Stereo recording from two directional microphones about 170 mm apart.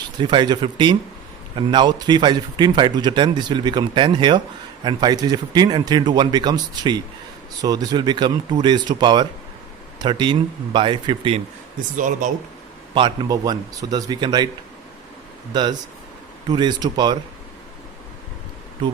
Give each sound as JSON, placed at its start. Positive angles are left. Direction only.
{"t": 0.2, "sound": "speech", "side_deg": -25}
{"t": 11.9, "sound": "speech", "side_deg": -50}
{"t": 12.9, "sound": "speech", "side_deg": -25}
{"t": 16.5, "sound": "speech", "side_deg": -25}